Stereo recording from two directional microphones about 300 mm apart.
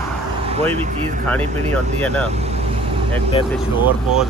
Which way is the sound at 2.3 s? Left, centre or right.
Right.